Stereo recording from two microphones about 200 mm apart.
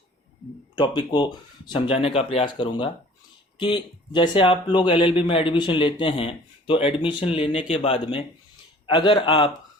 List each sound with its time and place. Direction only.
0.8 s speech: 25° left (ahead or behind)